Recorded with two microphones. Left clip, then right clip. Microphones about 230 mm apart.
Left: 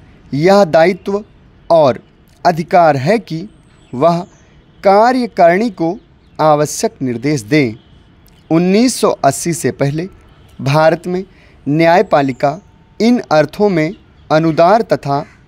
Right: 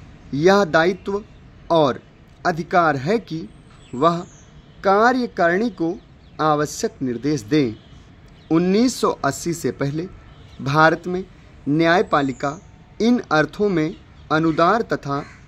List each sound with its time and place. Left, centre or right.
0.3 s speech: left